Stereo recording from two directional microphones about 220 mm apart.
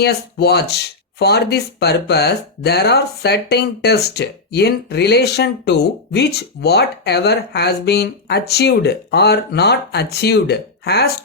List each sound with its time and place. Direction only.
0.0 s speech: 45° left (ahead or behind)